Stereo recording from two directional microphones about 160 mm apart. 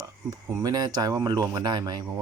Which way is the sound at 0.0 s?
20° right (ahead or behind).